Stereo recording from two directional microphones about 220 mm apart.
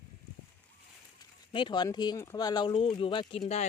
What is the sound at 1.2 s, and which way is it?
Speech, 20° left (ahead or behind).